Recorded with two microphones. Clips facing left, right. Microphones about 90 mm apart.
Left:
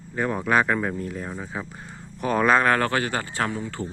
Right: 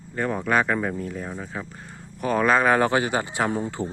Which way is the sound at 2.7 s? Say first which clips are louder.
Right 3 dB; 15° right (ahead or behind).